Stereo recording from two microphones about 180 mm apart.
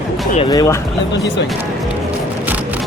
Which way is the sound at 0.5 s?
20° left (ahead or behind).